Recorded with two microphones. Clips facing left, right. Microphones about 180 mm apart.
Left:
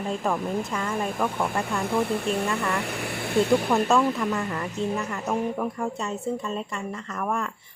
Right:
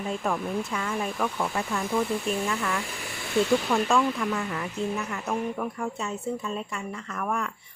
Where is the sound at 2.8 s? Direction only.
60° left (ahead or behind).